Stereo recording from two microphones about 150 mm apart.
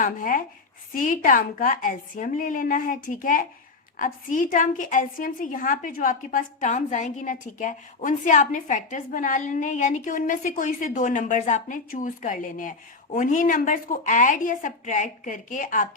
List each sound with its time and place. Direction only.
0.0 s a woman's voice: 60° left (ahead or behind)